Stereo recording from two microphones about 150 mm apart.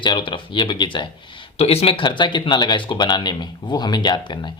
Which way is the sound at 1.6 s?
40° left (ahead or behind).